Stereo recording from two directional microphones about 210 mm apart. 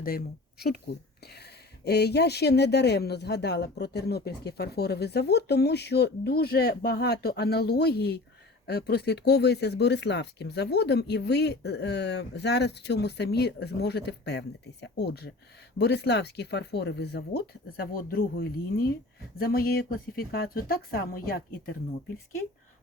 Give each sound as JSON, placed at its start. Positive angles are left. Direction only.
{"t": 0.0, "sound": "speech", "side_deg": 45}